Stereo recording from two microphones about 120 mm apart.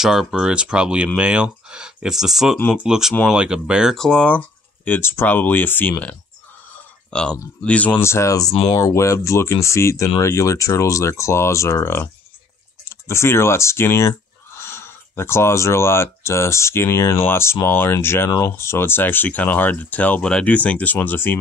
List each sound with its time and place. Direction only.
0.0 s speech: 5° right (ahead or behind)
4.8 s speech: 15° left (ahead or behind)